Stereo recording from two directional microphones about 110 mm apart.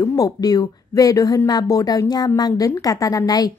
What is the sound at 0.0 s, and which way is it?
A woman's voice, 35° left (ahead or behind).